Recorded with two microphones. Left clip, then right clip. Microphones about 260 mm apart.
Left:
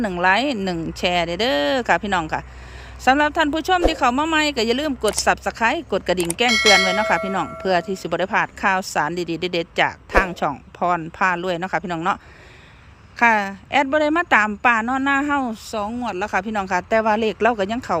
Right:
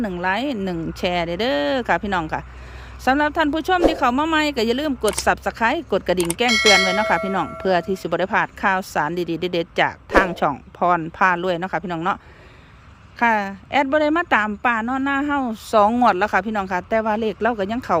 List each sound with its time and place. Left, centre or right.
0.0 s speech: centre